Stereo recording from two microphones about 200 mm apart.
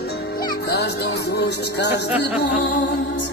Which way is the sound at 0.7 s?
55° left (ahead or behind).